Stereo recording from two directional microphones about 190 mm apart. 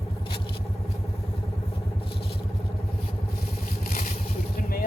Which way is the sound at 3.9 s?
45° left (ahead or behind).